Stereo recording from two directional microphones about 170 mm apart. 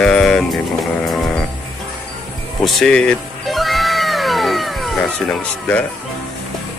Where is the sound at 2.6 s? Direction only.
Centre (ahead or behind).